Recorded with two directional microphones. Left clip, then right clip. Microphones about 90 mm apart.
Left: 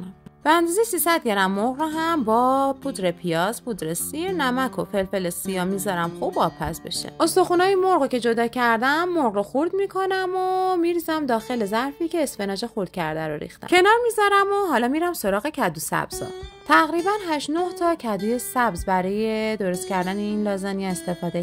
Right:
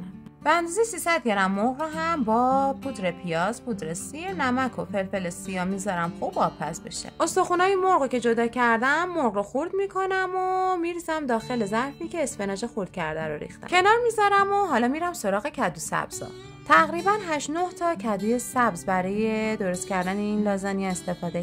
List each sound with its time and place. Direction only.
0.5 s a woman's voice: 45° left (ahead or behind)
7.2 s speech: 35° left (ahead or behind)
16.6 s speech: 25° left (ahead or behind)